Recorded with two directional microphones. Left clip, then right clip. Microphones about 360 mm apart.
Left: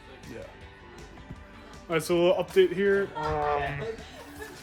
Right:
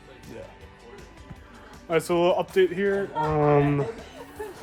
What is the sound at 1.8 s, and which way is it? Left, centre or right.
Speech, centre.